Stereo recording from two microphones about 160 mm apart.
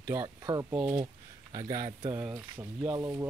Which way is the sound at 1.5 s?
30° right (ahead or behind).